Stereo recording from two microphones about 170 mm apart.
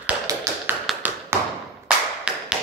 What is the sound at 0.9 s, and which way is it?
Tap, centre (ahead or behind).